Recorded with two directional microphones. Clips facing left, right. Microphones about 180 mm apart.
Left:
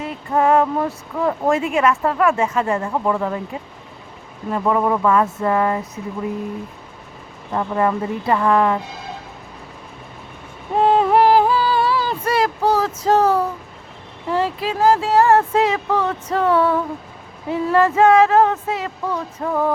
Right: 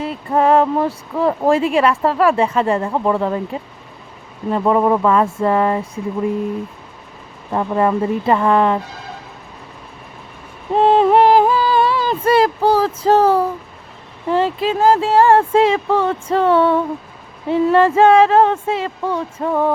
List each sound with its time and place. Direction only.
0.0 s speech: 30° right (ahead or behind)
7.5 s speech: 30° right (ahead or behind)
10.8 s a sound: 25° right (ahead or behind)
14.3 s speech: 25° right (ahead or behind)